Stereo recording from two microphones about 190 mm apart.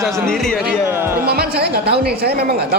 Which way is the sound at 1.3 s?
55° right (ahead or behind).